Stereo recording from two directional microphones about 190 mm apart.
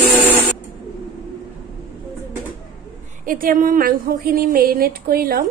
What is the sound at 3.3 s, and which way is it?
Speech, 45° right (ahead or behind).